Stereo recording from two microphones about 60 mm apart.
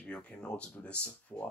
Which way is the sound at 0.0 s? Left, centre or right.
Centre.